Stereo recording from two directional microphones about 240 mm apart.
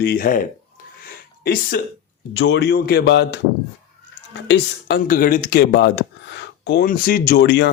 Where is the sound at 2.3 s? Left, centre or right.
Left.